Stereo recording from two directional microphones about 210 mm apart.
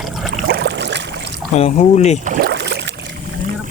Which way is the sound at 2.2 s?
40° right (ahead or behind).